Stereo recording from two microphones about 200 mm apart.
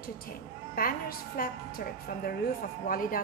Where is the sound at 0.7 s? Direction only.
45° left (ahead or behind).